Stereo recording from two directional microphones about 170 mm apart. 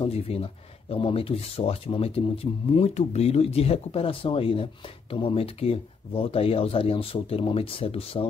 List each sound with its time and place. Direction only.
0.0 s speech: 35° left (ahead or behind)